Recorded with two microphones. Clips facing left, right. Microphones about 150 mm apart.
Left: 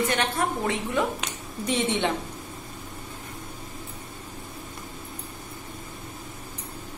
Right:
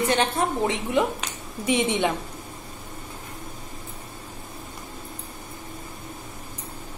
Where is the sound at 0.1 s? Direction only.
25° right (ahead or behind).